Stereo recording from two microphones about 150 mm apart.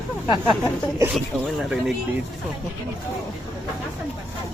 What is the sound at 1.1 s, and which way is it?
Speech, centre (ahead or behind).